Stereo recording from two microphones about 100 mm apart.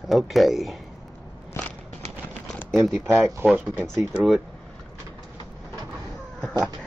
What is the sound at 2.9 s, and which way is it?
Speech, 25° right (ahead or behind).